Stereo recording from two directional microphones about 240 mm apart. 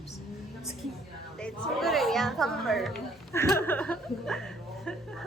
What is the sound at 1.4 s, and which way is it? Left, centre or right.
A man's voice, centre.